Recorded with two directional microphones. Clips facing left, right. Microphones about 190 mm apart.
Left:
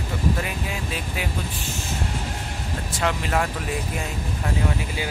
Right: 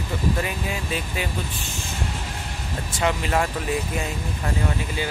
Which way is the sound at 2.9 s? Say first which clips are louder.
Right 1 dB; centre (ahead or behind).